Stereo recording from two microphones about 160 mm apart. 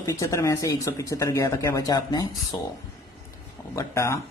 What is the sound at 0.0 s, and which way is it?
Speech, 20° left (ahead or behind).